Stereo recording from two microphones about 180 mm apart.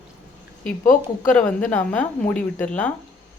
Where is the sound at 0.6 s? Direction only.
45° left (ahead or behind).